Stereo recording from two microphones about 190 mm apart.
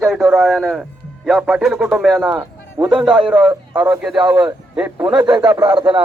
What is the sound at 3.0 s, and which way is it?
A man's voice, 5° right (ahead or behind).